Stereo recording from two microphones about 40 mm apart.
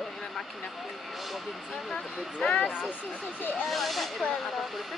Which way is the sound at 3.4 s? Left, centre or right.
Left.